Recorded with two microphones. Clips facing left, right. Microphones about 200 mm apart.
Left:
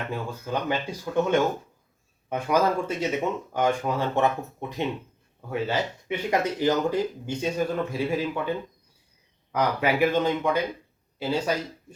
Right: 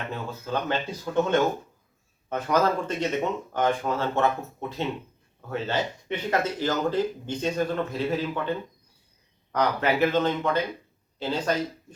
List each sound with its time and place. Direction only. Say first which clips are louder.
0.1 s speech: right 1 dB; 15° left (ahead or behind)
5.5 s speech: left 1 dB; 10° left (ahead or behind)